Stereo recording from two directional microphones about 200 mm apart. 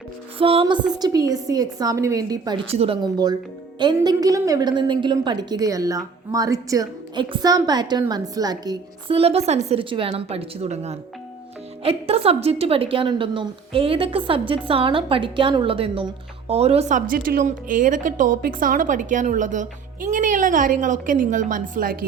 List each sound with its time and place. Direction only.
0.3 s a woman's voice: 30° right (ahead or behind)
2.6 s a woman's voice: 30° right (ahead or behind)